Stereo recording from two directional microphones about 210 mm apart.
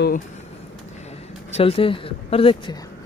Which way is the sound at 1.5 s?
25° left (ahead or behind).